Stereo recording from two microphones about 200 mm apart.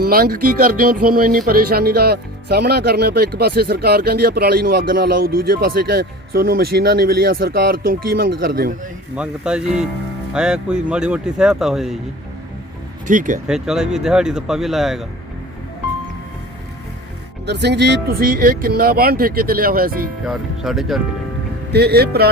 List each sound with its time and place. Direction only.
0.0 s speech: 50° right (ahead or behind)
9.1 s speech: 5° right (ahead or behind)
13.1 s speech: 40° right (ahead or behind)
13.5 s speech: 5° right (ahead or behind)
17.4 s speech: 55° right (ahead or behind)
20.2 s speech: centre (ahead or behind)
21.7 s speech: 55° right (ahead or behind)